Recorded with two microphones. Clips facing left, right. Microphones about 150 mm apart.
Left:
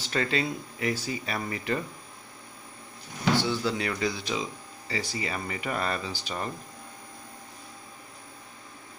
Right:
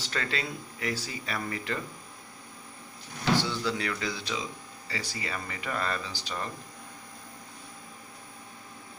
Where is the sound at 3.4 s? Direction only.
20° left (ahead or behind).